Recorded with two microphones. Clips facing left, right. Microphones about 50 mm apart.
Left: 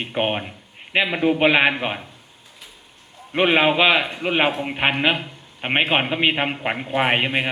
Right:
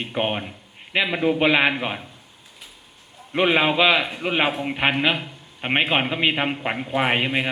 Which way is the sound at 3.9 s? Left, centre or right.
Centre.